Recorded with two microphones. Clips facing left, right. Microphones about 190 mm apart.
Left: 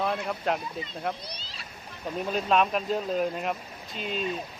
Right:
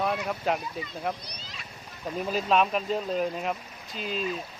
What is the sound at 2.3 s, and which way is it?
Speech, centre (ahead or behind).